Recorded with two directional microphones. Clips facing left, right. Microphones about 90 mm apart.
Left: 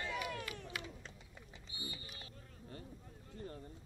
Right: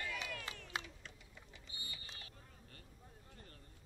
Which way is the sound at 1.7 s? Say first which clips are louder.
Left 5 dB; 25° left (ahead or behind).